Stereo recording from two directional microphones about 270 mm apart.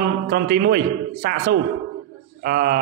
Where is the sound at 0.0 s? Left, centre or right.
Right.